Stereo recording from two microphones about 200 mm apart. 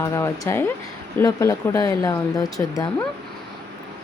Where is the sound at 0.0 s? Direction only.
15° left (ahead or behind).